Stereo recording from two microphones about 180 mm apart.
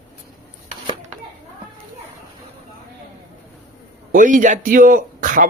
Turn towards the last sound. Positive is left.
turn(degrees=-50)  # may be behind; listen again after turning